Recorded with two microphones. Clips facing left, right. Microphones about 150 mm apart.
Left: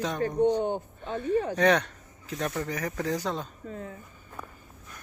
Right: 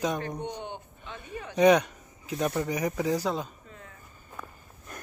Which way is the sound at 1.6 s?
10° right (ahead or behind).